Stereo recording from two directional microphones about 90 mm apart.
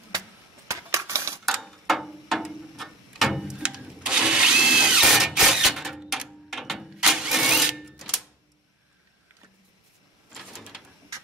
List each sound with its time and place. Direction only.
0.7 s coin: 35° right (ahead or behind)
1.6 s ratchet: centre (ahead or behind)
10.3 s door: 5° right (ahead or behind)